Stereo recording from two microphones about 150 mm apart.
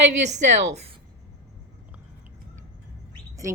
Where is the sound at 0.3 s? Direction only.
50° right (ahead or behind).